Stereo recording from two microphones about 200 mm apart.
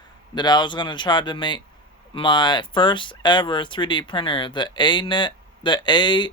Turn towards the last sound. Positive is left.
turn(degrees=20)  # may be behind; listen again after turning